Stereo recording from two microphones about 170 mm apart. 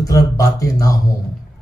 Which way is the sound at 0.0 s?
20° left (ahead or behind).